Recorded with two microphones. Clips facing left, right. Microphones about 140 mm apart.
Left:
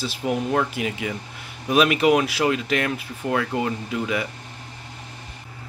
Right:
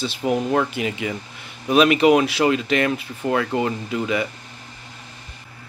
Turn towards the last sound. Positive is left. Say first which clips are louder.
# right 2 dB
turn(degrees=0)  # may be behind; listen again after turning